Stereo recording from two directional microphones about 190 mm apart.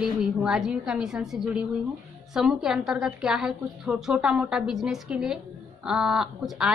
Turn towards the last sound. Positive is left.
turn(degrees=-5)  # may be behind; listen again after turning